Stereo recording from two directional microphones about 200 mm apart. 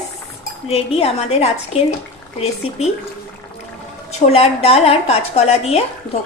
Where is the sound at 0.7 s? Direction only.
30° left (ahead or behind).